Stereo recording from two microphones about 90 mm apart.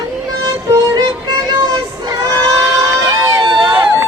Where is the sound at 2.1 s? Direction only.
40° right (ahead or behind).